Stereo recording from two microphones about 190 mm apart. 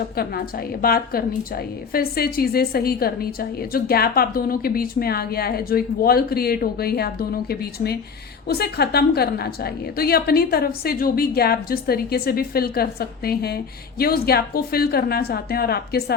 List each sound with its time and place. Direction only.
0.2 s a woman's voice: 50° left (ahead or behind)